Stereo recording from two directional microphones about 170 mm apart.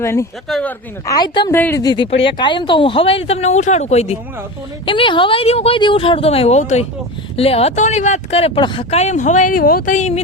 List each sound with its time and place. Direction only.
0.0 s a woman's voice: 15° left (ahead or behind)
0.4 s speech: centre (ahead or behind)
1.0 s speech: 25° left (ahead or behind)
1.5 s a woman's voice: 15° left (ahead or behind)
1.8 s speech: 25° left (ahead or behind); by 10.2 s 45° left (ahead or behind)